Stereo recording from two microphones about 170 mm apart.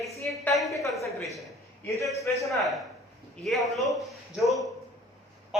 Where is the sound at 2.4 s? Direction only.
Centre (ahead or behind).